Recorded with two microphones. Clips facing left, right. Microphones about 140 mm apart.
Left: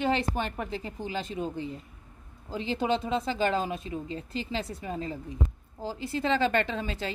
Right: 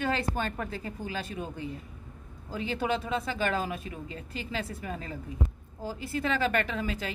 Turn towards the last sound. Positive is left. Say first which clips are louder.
# even
turn(degrees=30)  # may be behind; listen again after turning